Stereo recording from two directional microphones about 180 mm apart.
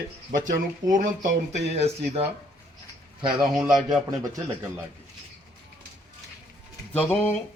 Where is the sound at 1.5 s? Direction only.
40° right (ahead or behind).